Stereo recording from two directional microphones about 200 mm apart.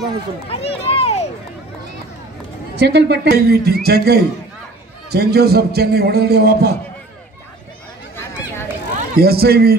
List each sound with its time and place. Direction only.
0.5 s speech: 30° left (ahead or behind)
2.7 s a man's voice: 55° right (ahead or behind)
8.9 s a man's voice: 50° right (ahead or behind)